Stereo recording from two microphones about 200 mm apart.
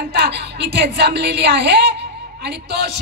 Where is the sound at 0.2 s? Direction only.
55° right (ahead or behind).